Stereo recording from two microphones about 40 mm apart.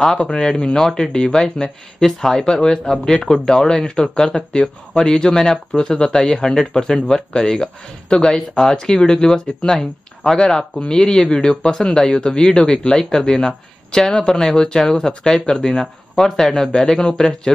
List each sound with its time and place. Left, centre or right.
0.2 s speech: centre